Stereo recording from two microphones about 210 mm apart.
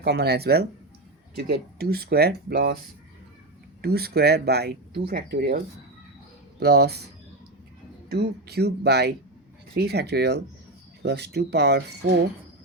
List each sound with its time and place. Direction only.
0.0 s speech: 50° right (ahead or behind)
3.8 s speech: 50° right (ahead or behind)
6.6 s speech: 50° right (ahead or behind)
8.1 s speech: 50° right (ahead or behind)